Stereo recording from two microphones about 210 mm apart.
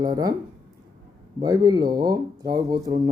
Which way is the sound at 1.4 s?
20° right (ahead or behind).